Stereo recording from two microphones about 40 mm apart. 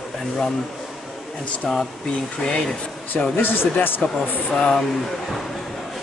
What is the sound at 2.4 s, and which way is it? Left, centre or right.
Speech, centre.